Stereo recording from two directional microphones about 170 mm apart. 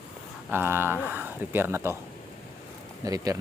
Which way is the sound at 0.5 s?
15° right (ahead or behind).